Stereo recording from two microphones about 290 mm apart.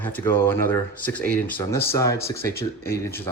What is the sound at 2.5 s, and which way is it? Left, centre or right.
Speech, left.